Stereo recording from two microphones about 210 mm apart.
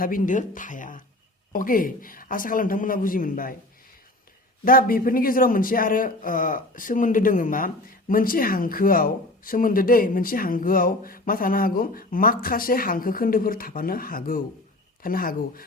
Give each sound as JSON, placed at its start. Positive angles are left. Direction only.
{"t": 0.0, "sound": "speech", "side_deg": 40}
{"t": 4.6, "sound": "a man's voice", "side_deg": 45}